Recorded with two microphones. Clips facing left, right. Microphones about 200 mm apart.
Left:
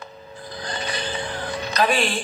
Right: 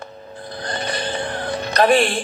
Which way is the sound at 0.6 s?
55° right (ahead or behind).